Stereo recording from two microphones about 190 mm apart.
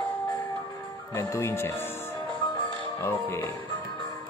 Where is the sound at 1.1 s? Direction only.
15° left (ahead or behind).